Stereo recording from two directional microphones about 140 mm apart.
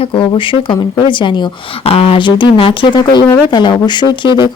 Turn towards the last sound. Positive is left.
turn(degrees=35)  # may be behind; listen again after turning